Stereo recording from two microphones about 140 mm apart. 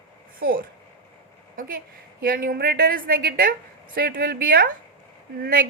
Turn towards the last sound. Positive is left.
turn(degrees=-90)